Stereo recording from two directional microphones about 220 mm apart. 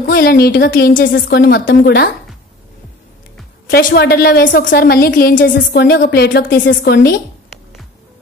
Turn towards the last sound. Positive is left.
turn(degrees=45)  # may be behind; listen again after turning